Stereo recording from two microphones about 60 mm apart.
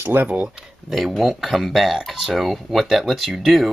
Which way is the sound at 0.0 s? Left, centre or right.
Right.